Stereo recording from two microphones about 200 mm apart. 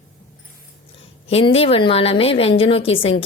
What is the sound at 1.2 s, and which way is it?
Speech, 30° left (ahead or behind).